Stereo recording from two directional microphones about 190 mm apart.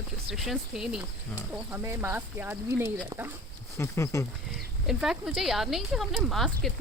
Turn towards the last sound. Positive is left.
turn(degrees=0)  # may be behind; listen again after turning